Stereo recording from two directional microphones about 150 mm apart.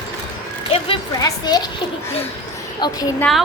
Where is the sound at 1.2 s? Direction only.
25° left (ahead or behind).